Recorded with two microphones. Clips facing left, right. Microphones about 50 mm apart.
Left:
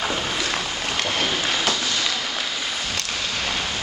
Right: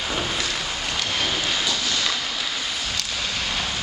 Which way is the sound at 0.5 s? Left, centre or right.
Left.